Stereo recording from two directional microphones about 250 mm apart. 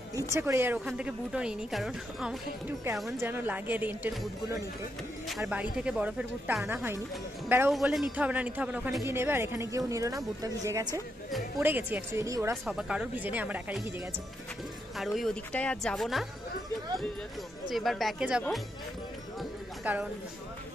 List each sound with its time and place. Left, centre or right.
0.1 s a woman's voice: centre
15.0 s a woman's voice: centre
17.6 s a woman's voice: centre
19.8 s speech: centre